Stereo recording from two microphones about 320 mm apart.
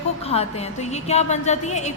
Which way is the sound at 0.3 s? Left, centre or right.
Centre.